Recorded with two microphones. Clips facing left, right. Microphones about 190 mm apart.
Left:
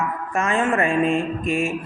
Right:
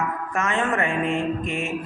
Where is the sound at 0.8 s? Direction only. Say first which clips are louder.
Left 4 dB; 20° right (ahead or behind).